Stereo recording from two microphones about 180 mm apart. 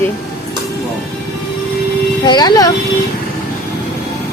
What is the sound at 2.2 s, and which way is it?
Speech, 25° left (ahead or behind).